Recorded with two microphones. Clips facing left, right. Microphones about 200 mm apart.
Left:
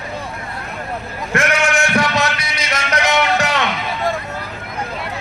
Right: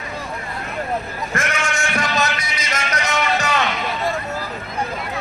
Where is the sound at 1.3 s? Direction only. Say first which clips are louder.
Left 7 dB; 65° left (ahead or behind).